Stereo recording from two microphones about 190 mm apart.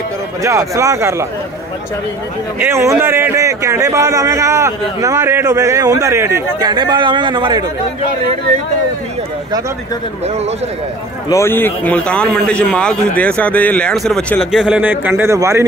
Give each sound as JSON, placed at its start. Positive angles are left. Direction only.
{"t": 0.4, "sound": "a man's voice", "side_deg": -15}
{"t": 2.6, "sound": "a man's voice", "side_deg": -15}
{"t": 11.2, "sound": "a man's voice", "side_deg": 15}